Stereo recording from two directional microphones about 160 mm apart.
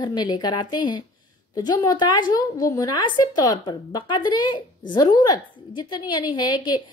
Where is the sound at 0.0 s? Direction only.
25° left (ahead or behind).